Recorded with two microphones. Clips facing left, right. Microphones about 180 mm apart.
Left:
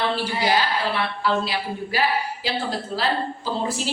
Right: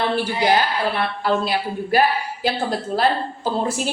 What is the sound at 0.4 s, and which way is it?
Speech, 50° right (ahead or behind).